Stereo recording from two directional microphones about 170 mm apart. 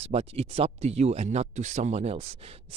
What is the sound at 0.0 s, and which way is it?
Speech, 35° right (ahead or behind).